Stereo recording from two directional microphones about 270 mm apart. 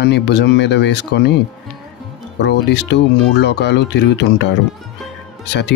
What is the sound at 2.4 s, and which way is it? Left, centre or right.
Speech, left.